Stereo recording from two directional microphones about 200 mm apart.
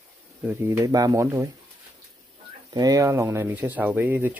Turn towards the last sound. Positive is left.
turn(degrees=-10)  # may be behind; listen again after turning